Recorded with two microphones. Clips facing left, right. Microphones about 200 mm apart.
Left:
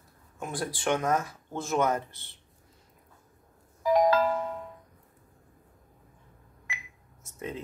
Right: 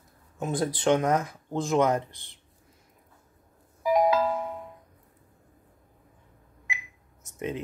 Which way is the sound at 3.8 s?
5° right (ahead or behind).